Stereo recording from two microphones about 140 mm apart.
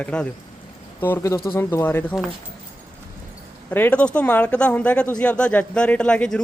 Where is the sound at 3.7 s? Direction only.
10° left (ahead or behind).